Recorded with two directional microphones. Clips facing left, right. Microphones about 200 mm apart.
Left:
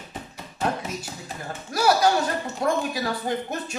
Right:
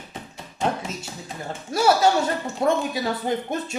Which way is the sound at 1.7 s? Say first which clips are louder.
Right 2 dB; 25° right (ahead or behind).